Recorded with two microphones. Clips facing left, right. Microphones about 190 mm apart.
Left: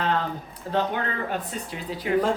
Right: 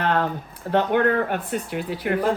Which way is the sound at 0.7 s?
60° right (ahead or behind).